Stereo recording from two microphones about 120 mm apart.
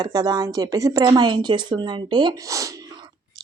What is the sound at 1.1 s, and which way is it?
Speech, 40° right (ahead or behind).